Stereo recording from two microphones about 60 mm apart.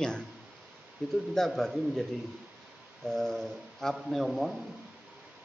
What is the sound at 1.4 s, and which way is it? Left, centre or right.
Speech, centre.